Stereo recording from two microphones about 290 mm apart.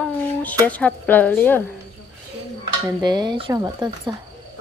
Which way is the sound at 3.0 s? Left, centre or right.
Centre.